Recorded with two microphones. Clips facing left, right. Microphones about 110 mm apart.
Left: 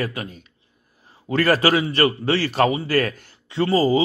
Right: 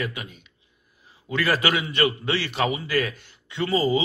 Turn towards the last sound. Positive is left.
turn(degrees=35)  # may be behind; listen again after turning